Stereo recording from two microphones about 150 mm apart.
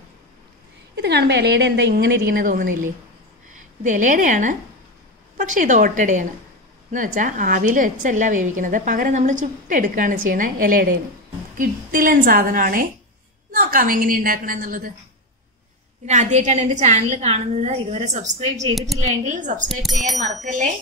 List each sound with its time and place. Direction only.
1.0 s a woman's voice: 90° right; by 14.9 s 65° right (ahead or behind)
16.1 s a woman's voice: 50° right (ahead or behind)
19.8 s speech: centre (ahead or behind)